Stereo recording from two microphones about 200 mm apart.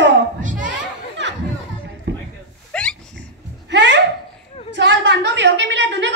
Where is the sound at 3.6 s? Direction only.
60° right (ahead or behind).